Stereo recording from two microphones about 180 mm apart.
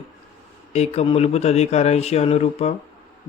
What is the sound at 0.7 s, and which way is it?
Speech, 35° left (ahead or behind).